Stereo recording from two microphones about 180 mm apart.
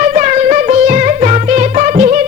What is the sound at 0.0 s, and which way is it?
Music, 45° right (ahead or behind).